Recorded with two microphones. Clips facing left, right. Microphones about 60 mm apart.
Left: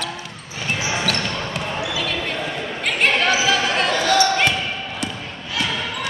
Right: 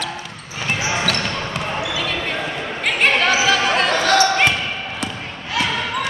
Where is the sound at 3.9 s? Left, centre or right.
Right.